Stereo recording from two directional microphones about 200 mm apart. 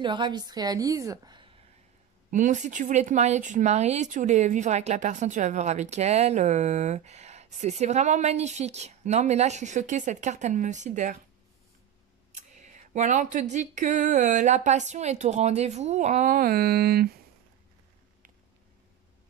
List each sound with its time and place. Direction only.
0.0 s a woman's voice: 20° right (ahead or behind)
2.3 s speech: 40° right (ahead or behind)
12.4 s speech: 35° right (ahead or behind)